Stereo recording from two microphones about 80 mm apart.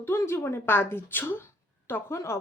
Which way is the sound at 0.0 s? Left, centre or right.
Left.